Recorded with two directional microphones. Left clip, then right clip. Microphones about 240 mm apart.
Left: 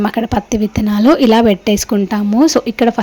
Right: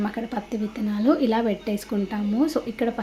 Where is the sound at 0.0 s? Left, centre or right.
Left.